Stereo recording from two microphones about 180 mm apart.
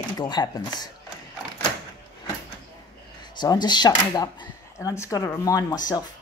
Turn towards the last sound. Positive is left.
turn(degrees=20)  # may be behind; listen again after turning